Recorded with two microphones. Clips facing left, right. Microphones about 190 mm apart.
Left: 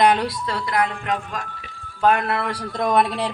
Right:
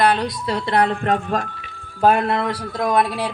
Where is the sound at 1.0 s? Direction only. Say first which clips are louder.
Right 6 dB; 50° right (ahead or behind).